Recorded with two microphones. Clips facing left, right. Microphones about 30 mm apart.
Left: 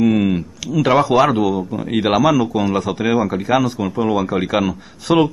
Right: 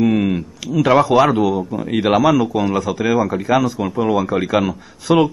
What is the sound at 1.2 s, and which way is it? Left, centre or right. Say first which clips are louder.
Speech: even; left.